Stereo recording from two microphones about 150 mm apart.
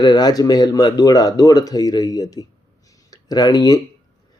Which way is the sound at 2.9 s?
25° left (ahead or behind).